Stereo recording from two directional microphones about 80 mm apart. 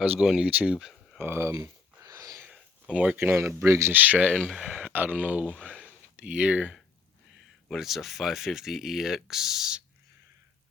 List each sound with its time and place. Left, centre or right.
0.4 s speech: centre
1.2 s speech: right
1.6 s a sound: right
2.9 s speech: centre
3.2 s speech: right
3.9 s speech: right
4.4 s speech: centre
4.8 s a sound: right
5.2 s speech: centre
5.8 s a sound: centre
7.7 s speech: centre